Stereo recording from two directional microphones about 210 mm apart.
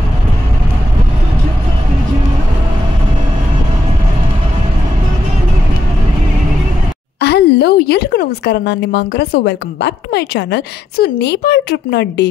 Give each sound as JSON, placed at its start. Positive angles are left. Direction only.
{"t": 7.2, "sound": "a woman's voice", "side_deg": 50}